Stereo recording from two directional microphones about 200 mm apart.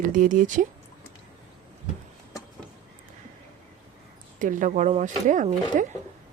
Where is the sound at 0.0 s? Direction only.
40° right (ahead or behind).